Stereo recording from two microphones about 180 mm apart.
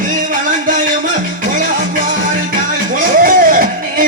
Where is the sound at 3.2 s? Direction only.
50° right (ahead or behind).